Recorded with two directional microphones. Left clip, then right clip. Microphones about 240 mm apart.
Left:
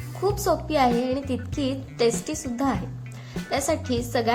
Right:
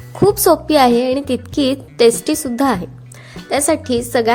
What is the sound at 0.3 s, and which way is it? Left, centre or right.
A woman's voice, right.